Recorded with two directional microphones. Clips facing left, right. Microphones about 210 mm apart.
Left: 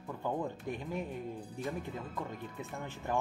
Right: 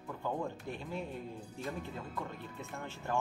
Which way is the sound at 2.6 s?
15° left (ahead or behind).